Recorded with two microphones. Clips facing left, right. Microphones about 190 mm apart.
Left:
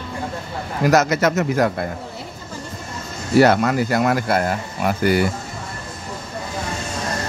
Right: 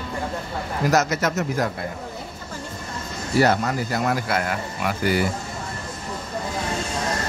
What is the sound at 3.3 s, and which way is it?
Speech, 70° left (ahead or behind).